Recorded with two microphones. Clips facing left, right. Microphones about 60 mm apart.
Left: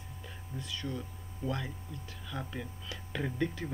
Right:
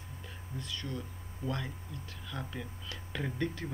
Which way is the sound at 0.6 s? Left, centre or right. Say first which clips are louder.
Left 1 dB; centre.